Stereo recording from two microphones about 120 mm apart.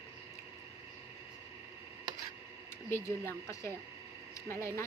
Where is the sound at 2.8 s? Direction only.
20° left (ahead or behind).